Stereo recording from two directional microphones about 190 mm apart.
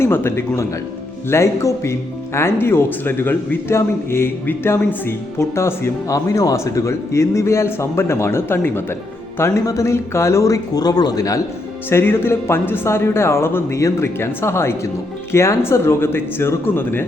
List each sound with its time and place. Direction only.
0.0 s speech: 10° left (ahead or behind)